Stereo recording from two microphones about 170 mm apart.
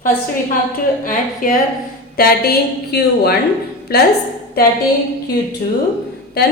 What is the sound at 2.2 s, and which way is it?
A woman's voice, 70° left (ahead or behind).